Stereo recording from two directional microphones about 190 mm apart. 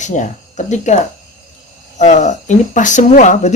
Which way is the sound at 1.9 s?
35° left (ahead or behind).